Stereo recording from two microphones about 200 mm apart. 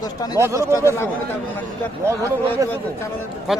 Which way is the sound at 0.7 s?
15° left (ahead or behind).